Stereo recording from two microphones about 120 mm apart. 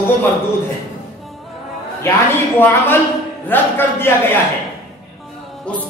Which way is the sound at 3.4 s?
15° left (ahead or behind).